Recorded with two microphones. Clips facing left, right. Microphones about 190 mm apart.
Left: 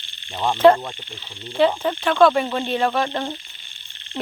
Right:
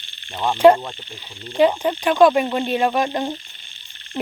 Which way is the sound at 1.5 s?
15° right (ahead or behind).